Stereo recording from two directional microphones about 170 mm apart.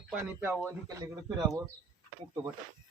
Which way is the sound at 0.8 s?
25° right (ahead or behind).